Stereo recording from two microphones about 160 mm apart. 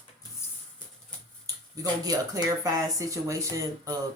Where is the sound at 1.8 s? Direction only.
20° right (ahead or behind).